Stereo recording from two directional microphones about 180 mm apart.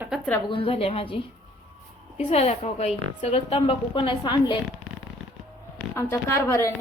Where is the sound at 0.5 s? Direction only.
30° left (ahead or behind).